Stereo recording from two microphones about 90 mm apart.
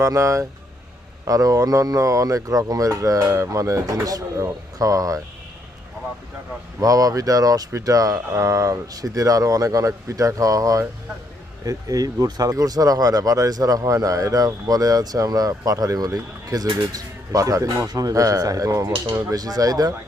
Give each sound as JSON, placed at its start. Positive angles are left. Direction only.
{"t": 0.0, "sound": "speech", "side_deg": -35}
{"t": 6.7, "sound": "speech", "side_deg": -40}